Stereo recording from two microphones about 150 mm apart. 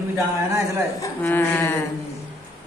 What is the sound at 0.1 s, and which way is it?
Speech, 15° right (ahead or behind).